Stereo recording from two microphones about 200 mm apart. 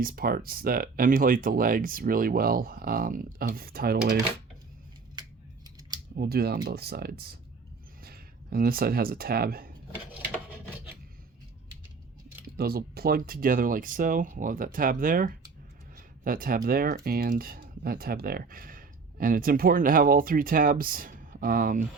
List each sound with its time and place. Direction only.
0.0 s speech: 45° right (ahead or behind)
5.2 s scissors: 20° right (ahead or behind)
6.1 s speech: 50° right (ahead or behind)
12.5 s speech: 50° right (ahead or behind)